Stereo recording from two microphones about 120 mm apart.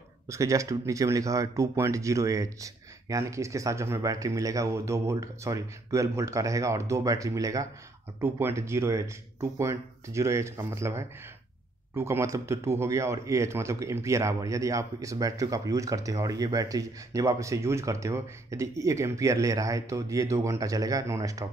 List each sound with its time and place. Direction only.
0.3 s a man's voice: 25° right (ahead or behind)